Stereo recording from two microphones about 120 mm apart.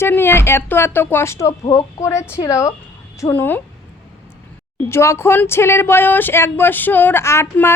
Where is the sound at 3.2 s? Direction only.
15° left (ahead or behind).